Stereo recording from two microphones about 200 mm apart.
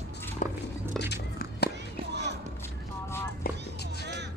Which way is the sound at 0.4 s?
40° left (ahead or behind).